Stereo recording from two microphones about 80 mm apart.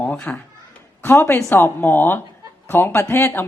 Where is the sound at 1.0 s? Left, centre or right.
Left.